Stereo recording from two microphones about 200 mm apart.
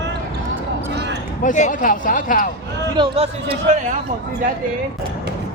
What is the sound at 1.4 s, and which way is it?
Speech, 40° left (ahead or behind).